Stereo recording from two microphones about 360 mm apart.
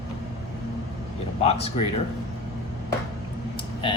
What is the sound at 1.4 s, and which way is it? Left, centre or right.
Speech, centre.